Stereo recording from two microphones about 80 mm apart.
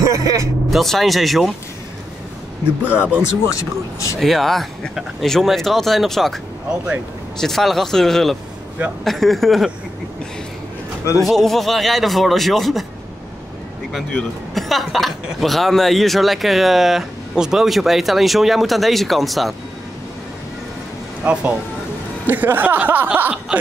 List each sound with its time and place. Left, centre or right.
0.0 s music: right
0.7 s speech: centre
2.8 s speech: centre
3.4 s speech: left
4.2 s speech: centre
11.1 s speech: centre
14.5 s speech: centre
21.2 s speech: centre